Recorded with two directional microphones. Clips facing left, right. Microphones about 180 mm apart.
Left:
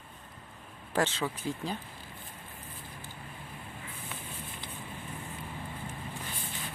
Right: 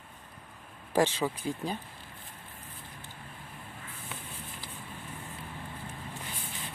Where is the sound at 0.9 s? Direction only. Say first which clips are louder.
Right 3 dB; 15° right (ahead or behind).